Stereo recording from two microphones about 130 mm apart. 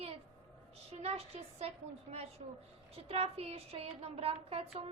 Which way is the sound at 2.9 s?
50° right (ahead or behind).